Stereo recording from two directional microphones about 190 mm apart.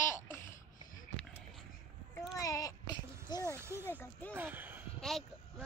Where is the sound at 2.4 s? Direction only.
15° left (ahead or behind).